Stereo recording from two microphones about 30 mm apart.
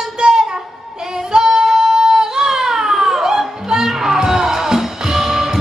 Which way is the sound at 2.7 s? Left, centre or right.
Centre.